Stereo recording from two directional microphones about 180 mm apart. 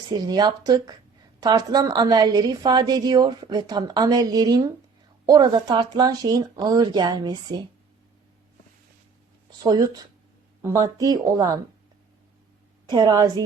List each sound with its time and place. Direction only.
0.3 s a woman's voice: 20° right (ahead or behind)
9.6 s a woman's voice: 20° right (ahead or behind)
12.9 s a woman's voice: 25° right (ahead or behind)